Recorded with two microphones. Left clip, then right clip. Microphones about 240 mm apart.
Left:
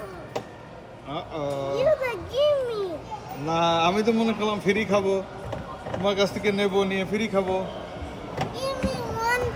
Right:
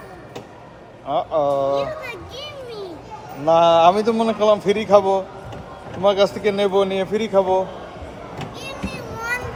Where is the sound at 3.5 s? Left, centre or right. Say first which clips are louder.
Right 10 dB; right.